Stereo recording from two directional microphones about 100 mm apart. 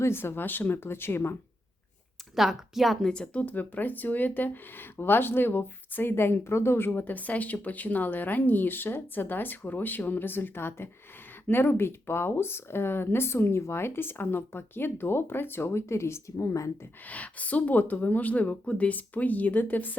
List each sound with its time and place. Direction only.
0.0 s speech: 25° left (ahead or behind)
2.3 s speech: 5° right (ahead or behind); by 16.7 s 30° left (ahead or behind)
17.1 s speech: 15° left (ahead or behind)